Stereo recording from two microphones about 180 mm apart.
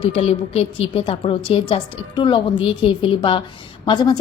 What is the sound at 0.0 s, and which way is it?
A woman's voice, 30° left (ahead or behind).